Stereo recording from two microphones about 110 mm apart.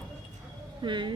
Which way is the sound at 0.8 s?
45° right (ahead or behind).